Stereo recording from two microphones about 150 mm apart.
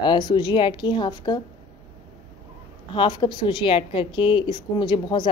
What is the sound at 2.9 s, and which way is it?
A woman's voice, 35° left (ahead or behind).